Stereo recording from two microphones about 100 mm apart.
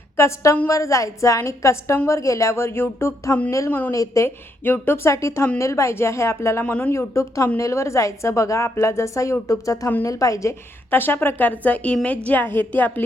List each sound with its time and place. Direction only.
0.2 s a woman's voice: 25° left (ahead or behind)
3.9 s a woman's voice: 35° left (ahead or behind)
4.6 s a woman's voice: 20° left (ahead or behind)
6.7 s speech: 15° left (ahead or behind)
6.9 s a woman's voice: 25° left (ahead or behind)
10.9 s speech: 20° left (ahead or behind)